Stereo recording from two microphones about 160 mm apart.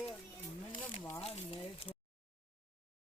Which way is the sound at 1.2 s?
35° left (ahead or behind).